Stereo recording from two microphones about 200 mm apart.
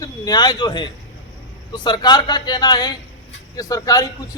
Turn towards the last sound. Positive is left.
turn(degrees=20)  # may be behind; listen again after turning